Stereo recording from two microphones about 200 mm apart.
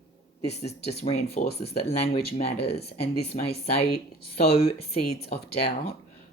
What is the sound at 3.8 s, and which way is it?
Speech, 55° left (ahead or behind).